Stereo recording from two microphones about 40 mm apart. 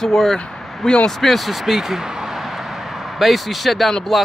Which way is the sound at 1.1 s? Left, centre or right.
Centre.